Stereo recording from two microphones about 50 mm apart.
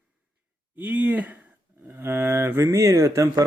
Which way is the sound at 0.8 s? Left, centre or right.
Right.